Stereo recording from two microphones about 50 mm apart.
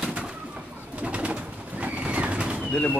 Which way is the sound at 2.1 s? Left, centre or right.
Right.